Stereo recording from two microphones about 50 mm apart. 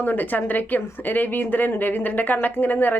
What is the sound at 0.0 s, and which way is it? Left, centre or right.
Speech, left.